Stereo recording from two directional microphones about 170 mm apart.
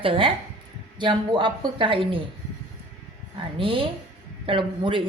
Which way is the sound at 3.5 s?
30° right (ahead or behind).